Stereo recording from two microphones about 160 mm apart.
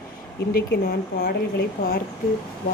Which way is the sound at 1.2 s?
85° left.